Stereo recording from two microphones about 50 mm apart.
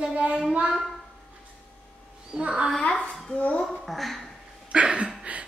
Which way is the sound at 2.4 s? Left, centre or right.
Centre.